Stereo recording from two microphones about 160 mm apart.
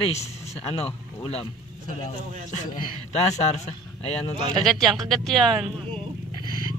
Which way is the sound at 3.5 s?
40° left (ahead or behind).